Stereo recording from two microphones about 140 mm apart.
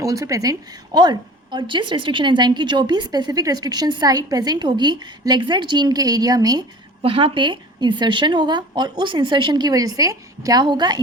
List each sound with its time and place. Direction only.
0.0 s a woman's voice: 25° right (ahead or behind)
7.0 s a woman's voice: 40° right (ahead or behind)